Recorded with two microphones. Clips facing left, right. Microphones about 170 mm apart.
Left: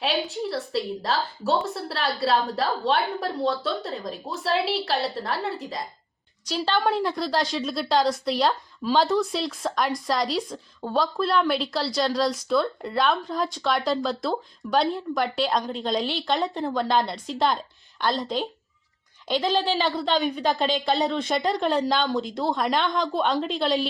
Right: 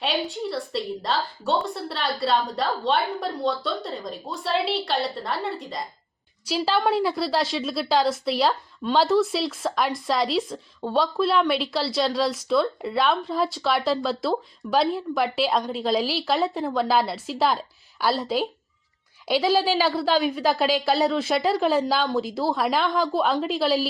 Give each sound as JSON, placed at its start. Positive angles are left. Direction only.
{"t": 0.0, "sound": "a woman's voice", "side_deg": 0}